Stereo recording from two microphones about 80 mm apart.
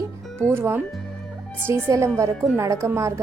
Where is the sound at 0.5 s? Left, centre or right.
Right.